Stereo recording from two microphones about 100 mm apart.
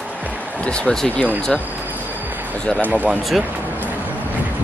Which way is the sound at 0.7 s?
10° left (ahead or behind).